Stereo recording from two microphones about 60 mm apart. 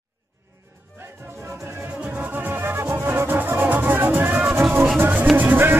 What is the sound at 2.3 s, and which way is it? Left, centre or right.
Music, right.